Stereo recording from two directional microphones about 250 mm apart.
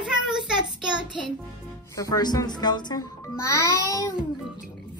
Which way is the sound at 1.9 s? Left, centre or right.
Centre.